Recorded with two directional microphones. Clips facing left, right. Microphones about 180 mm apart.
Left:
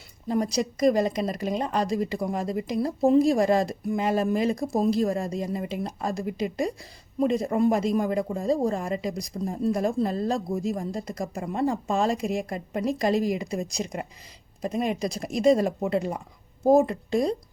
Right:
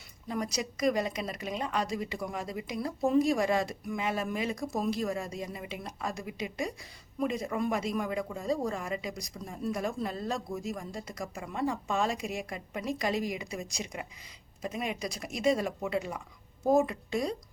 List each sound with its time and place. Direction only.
0.3 s speech: 35° left (ahead or behind)